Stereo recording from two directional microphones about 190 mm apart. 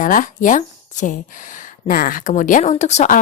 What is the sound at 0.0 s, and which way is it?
A woman's voice, 45° left (ahead or behind).